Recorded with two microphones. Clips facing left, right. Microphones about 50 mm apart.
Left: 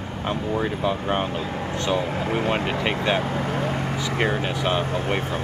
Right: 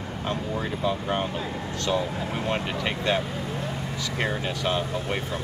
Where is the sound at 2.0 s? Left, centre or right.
Left.